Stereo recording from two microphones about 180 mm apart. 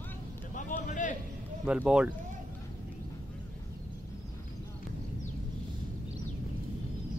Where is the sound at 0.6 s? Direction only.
45° left (ahead or behind).